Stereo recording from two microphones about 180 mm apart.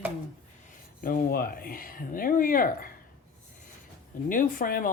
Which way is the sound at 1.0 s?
55° left (ahead or behind).